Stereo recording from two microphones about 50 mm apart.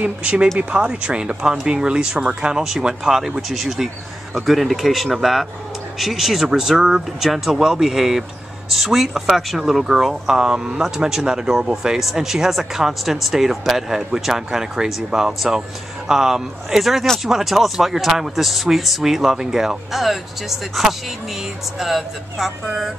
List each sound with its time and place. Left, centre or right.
0.0 s speech: right; by 22.8 s centre